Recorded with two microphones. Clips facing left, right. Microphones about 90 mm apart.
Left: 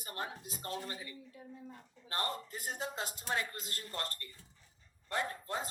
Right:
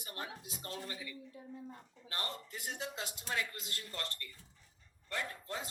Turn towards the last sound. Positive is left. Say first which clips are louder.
# left 4 dB
turn(degrees=35)  # may be behind; listen again after turning